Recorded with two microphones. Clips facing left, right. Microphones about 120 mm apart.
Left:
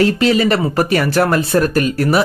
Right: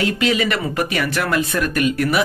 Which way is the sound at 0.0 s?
40° left (ahead or behind).